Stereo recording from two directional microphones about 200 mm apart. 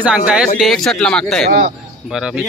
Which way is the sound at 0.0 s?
5° right (ahead or behind).